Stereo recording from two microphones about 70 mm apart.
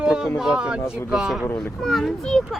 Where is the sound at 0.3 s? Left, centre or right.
Centre.